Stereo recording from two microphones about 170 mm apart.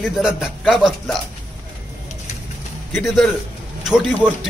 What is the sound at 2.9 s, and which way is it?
Speech, centre (ahead or behind).